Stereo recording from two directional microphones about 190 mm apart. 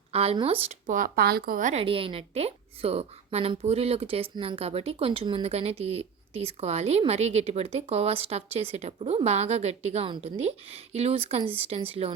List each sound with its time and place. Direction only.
0.1 s a woman's voice: 30° right (ahead or behind)
1.8 s a woman's voice: 30° right (ahead or behind)